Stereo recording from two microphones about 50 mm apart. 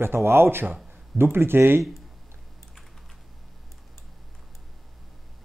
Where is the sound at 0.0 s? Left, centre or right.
Right.